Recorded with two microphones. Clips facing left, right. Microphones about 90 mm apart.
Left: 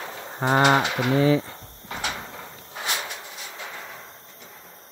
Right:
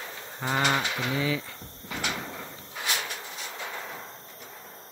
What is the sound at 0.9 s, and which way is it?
Speech, 40° left (ahead or behind).